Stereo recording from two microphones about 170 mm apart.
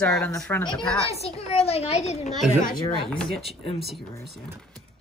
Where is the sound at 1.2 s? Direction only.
35° left (ahead or behind).